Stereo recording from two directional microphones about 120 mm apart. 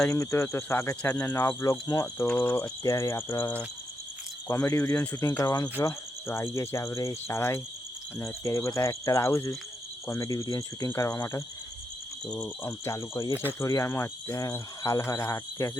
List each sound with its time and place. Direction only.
0.1 s speech: 25° left (ahead or behind)
2.2 s speech: 10° left (ahead or behind)
4.4 s speech: 25° left (ahead or behind)
5.4 s speech: 30° left (ahead or behind)
5.8 s speech: 20° left (ahead or behind)
12.2 s speech: 10° left (ahead or behind)
12.8 s speech: 25° left (ahead or behind)